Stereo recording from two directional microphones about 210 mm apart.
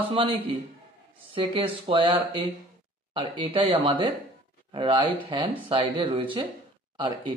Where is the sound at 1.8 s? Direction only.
25° right (ahead or behind).